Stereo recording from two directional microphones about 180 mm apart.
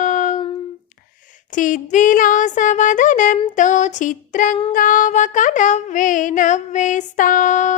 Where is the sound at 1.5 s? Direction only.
45° left (ahead or behind).